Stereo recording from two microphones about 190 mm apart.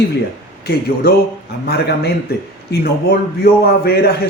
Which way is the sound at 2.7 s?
55° left (ahead or behind).